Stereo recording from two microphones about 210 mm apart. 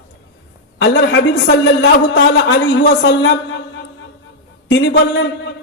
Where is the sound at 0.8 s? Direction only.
55° left (ahead or behind).